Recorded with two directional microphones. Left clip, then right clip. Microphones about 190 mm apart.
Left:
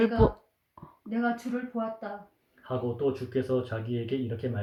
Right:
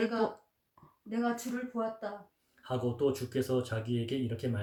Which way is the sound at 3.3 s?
55° right (ahead or behind).